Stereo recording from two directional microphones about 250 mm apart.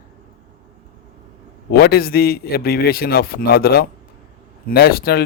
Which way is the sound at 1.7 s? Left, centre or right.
Left.